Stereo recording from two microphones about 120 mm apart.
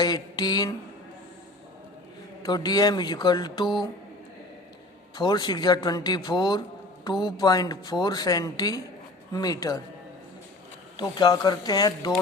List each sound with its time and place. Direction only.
0.0 s mantra: 35° left (ahead or behind)
2.4 s speech: 35° left (ahead or behind)
5.1 s speech: 35° left (ahead or behind)
10.9 s speech: 35° left (ahead or behind)